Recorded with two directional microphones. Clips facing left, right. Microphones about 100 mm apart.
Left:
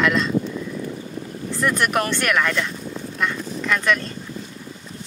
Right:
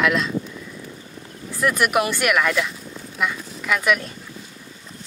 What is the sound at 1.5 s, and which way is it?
Speech, 5° right (ahead or behind).